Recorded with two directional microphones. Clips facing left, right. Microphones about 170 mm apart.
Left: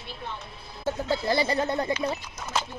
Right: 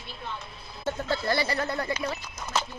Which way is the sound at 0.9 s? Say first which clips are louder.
Left 2 dB; 15° left (ahead or behind).